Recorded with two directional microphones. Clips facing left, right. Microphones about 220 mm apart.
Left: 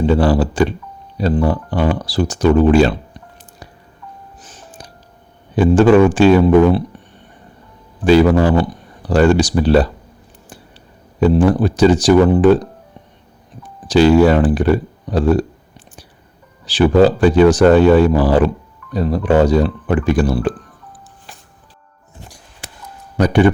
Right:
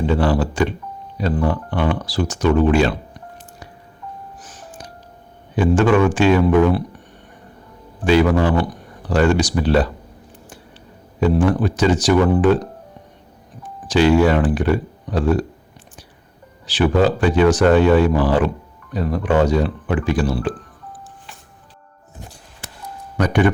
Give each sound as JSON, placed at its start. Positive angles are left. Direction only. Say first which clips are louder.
{"t": 0.0, "sound": "speech", "louder": "left 4 dB", "side_deg": 35}
{"t": 4.4, "sound": "music", "louder": "right 1 dB", "side_deg": 25}
{"t": 5.5, "sound": "speech", "louder": "left 5 dB", "side_deg": 35}
{"t": 8.0, "sound": "speech", "louder": "left 4 dB", "side_deg": 35}
{"t": 11.2, "sound": "speech", "louder": "left 4 dB", "side_deg": 35}
{"t": 13.8, "sound": "speech", "louder": "left 4 dB", "side_deg": 35}
{"t": 16.6, "sound": "speech", "louder": "left 5 dB", "side_deg": 35}
{"t": 23.1, "sound": "speech", "louder": "left 4 dB", "side_deg": 30}